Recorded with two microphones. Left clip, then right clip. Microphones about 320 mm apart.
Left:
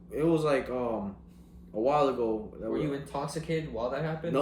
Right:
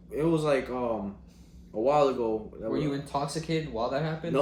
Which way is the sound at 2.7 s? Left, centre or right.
Right.